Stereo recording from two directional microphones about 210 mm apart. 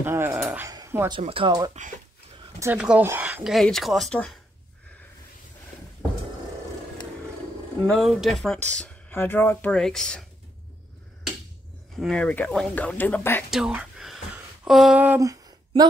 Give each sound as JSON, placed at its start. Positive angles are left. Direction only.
{"t": 0.0, "sound": "speech", "side_deg": -10}
{"t": 2.6, "sound": "speech", "side_deg": -5}
{"t": 7.9, "sound": "speech", "side_deg": 0}
{"t": 12.0, "sound": "speech", "side_deg": 5}
{"t": 13.5, "sound": "a sound", "side_deg": -5}